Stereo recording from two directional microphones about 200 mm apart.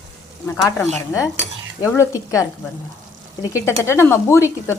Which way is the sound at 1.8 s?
15° left (ahead or behind).